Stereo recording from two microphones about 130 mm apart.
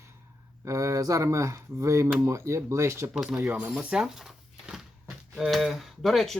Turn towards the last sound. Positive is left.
turn(degrees=0)  # may be behind; listen again after turning